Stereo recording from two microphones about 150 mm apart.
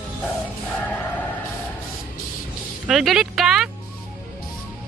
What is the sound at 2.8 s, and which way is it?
Music, centre (ahead or behind).